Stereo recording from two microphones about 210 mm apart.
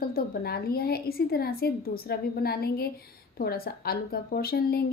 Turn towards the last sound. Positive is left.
turn(degrees=45)  # may be behind; listen again after turning